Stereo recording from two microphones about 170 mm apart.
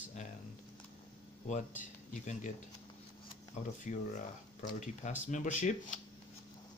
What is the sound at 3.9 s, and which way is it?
Speech, 45° left (ahead or behind).